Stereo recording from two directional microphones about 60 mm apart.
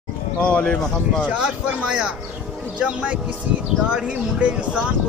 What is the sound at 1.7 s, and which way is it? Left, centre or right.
Speech, centre.